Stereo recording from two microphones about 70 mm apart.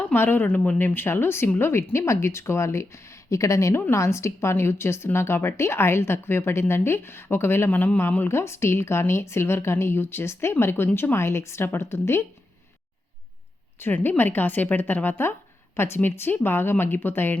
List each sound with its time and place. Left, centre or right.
0.0 s a woman's voice: left
13.7 s a woman's voice: left